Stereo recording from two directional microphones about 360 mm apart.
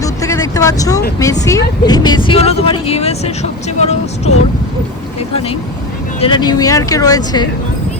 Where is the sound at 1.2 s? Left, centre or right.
Centre.